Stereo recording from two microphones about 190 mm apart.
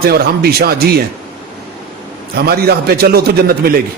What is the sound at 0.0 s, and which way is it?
A man's voice, 55° right (ahead or behind).